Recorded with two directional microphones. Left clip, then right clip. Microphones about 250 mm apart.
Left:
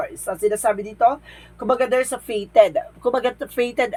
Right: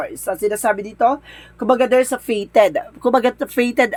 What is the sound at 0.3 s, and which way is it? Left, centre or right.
Speech, right.